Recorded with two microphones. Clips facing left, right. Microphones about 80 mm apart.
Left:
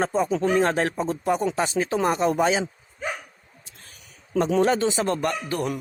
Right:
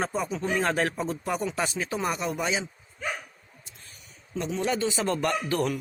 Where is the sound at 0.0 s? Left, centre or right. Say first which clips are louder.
Left 6 dB; left.